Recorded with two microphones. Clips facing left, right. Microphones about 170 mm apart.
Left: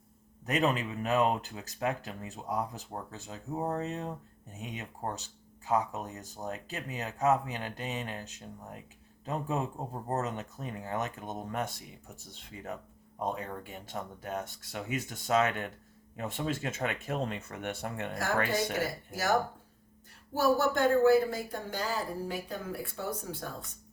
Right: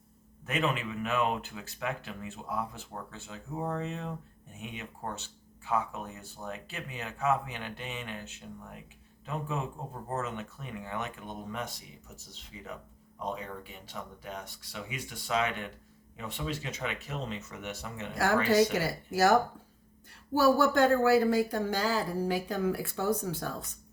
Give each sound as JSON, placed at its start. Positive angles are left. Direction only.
{"t": 0.4, "sound": "speech", "side_deg": 40}
{"t": 20.4, "sound": "a woman's voice", "side_deg": -90}